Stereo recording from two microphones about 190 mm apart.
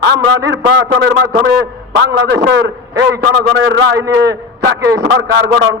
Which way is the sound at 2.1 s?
65° right (ahead or behind).